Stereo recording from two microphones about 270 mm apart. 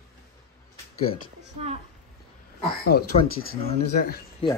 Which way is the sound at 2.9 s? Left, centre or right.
Left.